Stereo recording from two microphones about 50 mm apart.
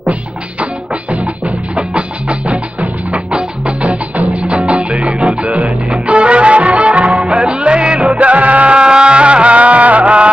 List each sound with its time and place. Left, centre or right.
1.8 s music: right